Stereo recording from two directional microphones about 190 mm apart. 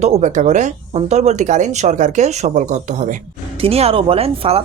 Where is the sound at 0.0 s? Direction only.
40° right (ahead or behind).